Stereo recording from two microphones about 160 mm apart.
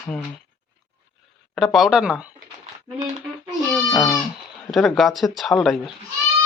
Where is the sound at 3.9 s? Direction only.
20° left (ahead or behind).